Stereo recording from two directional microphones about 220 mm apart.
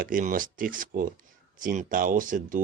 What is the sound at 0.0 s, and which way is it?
Speech, 40° right (ahead or behind).